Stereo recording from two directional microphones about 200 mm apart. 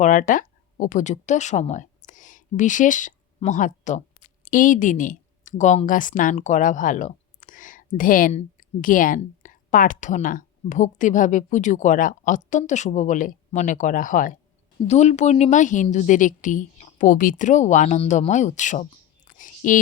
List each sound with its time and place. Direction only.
0.0 s a woman's voice: 40° left (ahead or behind)
19.3 s whispering: 40° left (ahead or behind)